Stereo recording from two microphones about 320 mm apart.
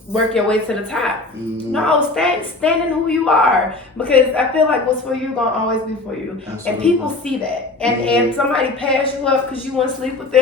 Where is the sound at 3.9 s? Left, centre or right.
Centre.